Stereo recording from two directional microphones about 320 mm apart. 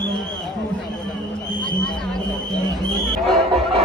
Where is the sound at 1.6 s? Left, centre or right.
Centre.